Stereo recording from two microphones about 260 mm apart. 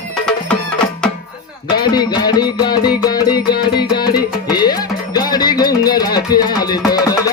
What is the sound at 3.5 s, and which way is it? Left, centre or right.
Music, left.